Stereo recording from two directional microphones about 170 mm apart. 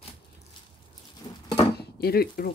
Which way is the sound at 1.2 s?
25° left (ahead or behind).